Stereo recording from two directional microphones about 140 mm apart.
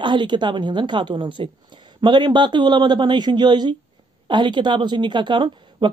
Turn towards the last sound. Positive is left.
turn(degrees=-35)  # may be behind; listen again after turning